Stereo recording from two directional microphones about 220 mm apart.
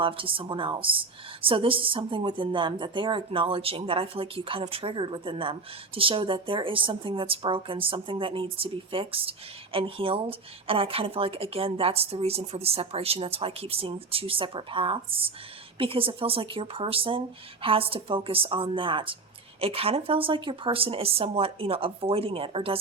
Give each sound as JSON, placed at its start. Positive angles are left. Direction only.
{"t": 0.0, "sound": "a woman's voice", "side_deg": -25}